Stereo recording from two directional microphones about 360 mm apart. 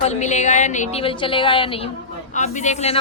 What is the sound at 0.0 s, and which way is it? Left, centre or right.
A man's voice, centre.